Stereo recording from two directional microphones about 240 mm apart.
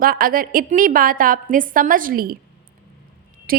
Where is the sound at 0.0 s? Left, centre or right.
Right.